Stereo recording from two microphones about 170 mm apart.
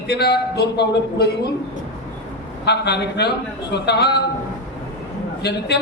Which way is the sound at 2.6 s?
80° left.